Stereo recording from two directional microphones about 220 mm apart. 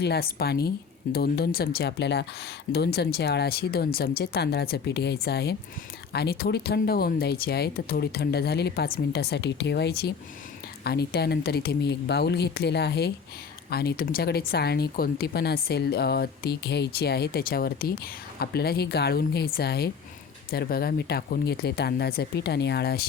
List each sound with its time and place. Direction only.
0.0 s speech: 45° left (ahead or behind)